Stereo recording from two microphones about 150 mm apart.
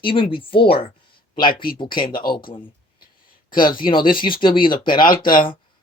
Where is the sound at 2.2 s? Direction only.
30° left (ahead or behind).